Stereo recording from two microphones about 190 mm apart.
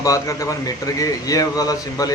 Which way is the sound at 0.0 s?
15° left (ahead or behind).